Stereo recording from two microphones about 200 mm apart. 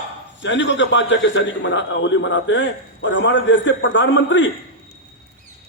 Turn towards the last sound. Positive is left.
turn(degrees=65)  # may be behind; listen again after turning